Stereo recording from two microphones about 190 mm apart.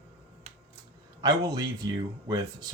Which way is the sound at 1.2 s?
20° right (ahead or behind).